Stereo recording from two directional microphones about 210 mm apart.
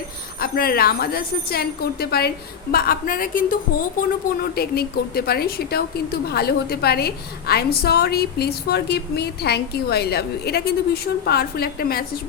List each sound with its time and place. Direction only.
0.3 s a woman's voice: 45° left (ahead or behind)